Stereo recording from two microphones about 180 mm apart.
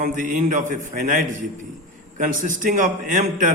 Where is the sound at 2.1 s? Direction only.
45° right (ahead or behind).